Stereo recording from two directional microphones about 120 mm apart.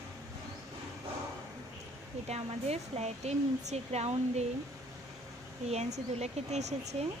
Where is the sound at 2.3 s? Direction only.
65° right (ahead or behind).